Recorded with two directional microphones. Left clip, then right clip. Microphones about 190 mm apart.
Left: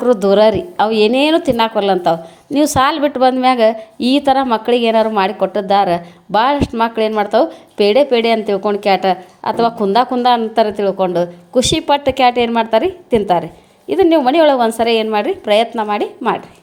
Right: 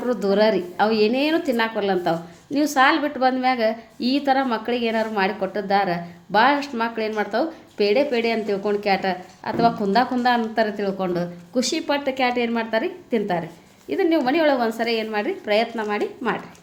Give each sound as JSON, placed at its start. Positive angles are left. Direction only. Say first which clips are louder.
{"t": 0.0, "sound": "a woman's voice", "louder": "left 9 dB", "side_deg": 40}